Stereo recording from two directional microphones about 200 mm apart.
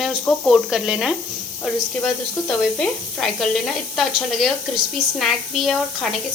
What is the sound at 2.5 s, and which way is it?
Speech, 5° left (ahead or behind).